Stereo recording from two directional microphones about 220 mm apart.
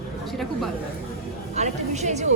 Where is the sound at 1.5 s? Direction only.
30° right (ahead or behind).